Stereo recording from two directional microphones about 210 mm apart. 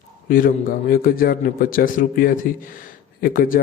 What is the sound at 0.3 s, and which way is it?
A man's voice, 40° left (ahead or behind).